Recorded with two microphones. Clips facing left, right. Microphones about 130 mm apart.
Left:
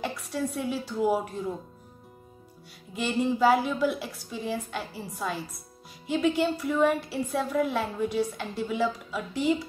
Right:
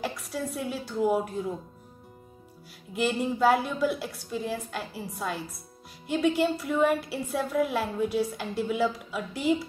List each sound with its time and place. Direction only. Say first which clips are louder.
0.0 s a woman's voice: left 2 dB; centre (ahead or behind)
2.9 s a woman's voice: even; centre (ahead or behind)